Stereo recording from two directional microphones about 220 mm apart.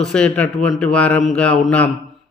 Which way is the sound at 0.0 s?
5° left (ahead or behind).